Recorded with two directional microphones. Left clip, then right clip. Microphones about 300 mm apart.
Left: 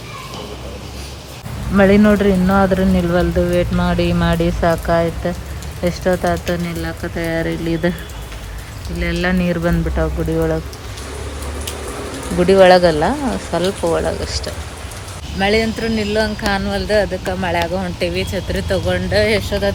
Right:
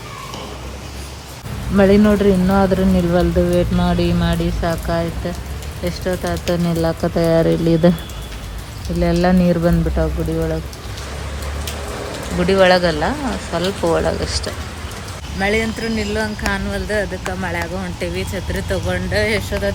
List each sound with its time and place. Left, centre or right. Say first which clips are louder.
1.7 s speech: left 1 dB; centre
7.3 s speech: right 5 dB; left
9.0 s speech: right 3 dB; centre
12.4 s speech: left 4 dB; centre